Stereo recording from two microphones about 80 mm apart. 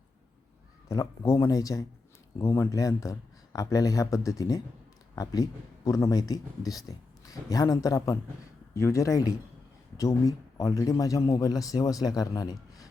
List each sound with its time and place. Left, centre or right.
1.2 s speech: left
1.5 s speech: left
2.4 s speech: left